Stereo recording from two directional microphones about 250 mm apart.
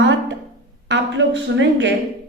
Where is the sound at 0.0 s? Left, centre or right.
Right.